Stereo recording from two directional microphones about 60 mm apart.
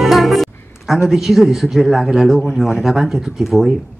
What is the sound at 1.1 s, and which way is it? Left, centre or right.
Speech, centre.